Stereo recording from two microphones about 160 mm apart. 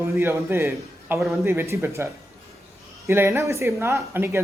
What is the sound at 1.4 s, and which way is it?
A woman's voice, 15° right (ahead or behind).